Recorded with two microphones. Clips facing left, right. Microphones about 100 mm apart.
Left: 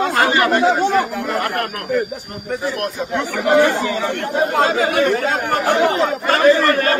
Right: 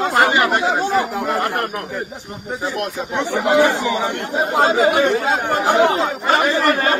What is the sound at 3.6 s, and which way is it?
Speech, 20° right (ahead or behind).